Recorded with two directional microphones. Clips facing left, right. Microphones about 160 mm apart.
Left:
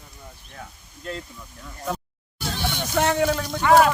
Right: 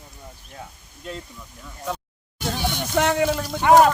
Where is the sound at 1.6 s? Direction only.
Centre (ahead or behind).